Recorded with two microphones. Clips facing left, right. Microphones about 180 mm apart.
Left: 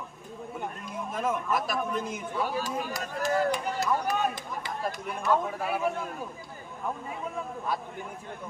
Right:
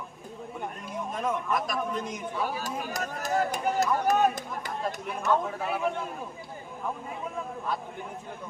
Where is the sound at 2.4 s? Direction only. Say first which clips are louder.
Left 2 dB; 45° right (ahead or behind).